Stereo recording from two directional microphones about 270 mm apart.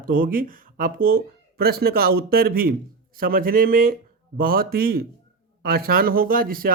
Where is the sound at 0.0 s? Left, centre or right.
Right.